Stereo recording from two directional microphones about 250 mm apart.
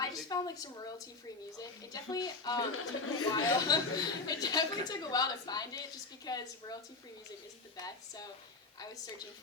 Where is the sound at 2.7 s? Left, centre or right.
Left.